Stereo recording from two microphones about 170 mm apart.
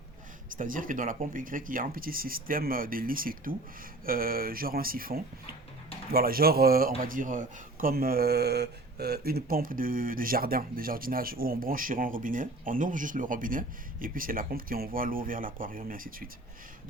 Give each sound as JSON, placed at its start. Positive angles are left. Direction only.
{"t": 0.5, "sound": "speech", "side_deg": -50}